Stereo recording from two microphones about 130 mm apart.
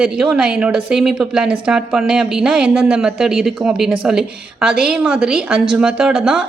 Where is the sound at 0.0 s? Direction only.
5° right (ahead or behind).